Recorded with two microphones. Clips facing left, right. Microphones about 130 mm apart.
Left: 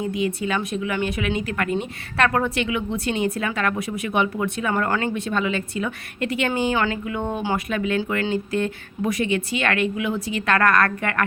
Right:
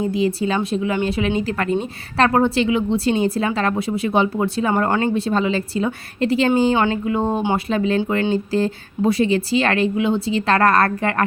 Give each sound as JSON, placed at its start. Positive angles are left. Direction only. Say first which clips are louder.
{"t": 0.0, "sound": "speech", "louder": "right 5 dB", "side_deg": -30}